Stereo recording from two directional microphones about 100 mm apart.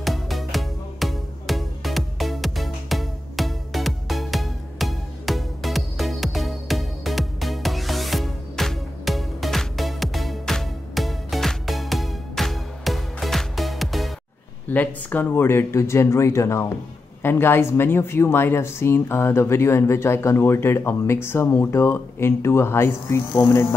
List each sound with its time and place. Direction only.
0.0 s music: centre (ahead or behind)
14.7 s a woman's voice: 15° left (ahead or behind)